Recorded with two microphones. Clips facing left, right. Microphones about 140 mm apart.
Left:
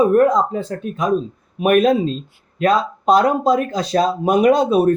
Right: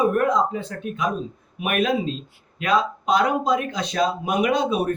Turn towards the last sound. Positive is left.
turn(degrees=40)  # may be behind; listen again after turning